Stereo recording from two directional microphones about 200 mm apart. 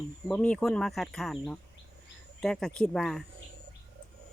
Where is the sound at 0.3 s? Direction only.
5° left (ahead or behind).